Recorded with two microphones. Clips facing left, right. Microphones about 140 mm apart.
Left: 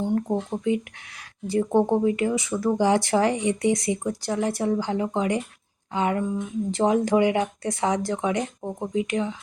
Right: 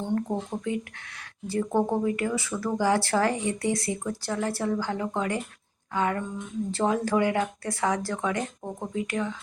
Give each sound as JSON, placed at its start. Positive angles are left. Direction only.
{"t": 0.0, "sound": "speech", "side_deg": 15}